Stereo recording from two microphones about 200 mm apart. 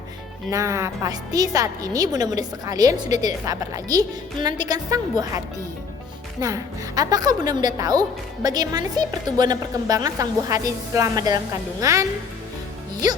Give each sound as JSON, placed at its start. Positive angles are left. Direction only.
{"t": 0.5, "sound": "a woman's voice", "side_deg": -15}
{"t": 6.4, "sound": "a woman's voice", "side_deg": -15}